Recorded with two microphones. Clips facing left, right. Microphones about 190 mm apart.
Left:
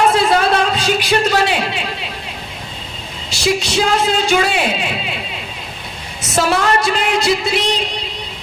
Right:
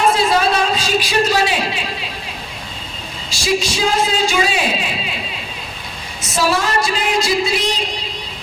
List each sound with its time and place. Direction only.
0.1 s a sound: 60° left (ahead or behind)
3.2 s a man's voice: 60° left (ahead or behind)
6.3 s a man's voice: 60° left (ahead or behind)